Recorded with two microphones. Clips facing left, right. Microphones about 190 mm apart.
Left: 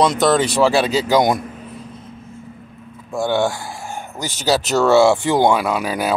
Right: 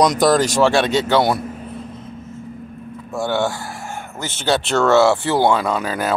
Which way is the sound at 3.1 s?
15° left (ahead or behind).